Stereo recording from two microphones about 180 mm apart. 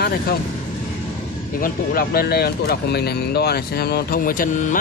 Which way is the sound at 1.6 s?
55° left (ahead or behind).